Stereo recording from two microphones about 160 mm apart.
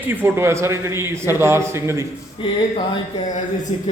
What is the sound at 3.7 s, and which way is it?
Speech, 40° left (ahead or behind).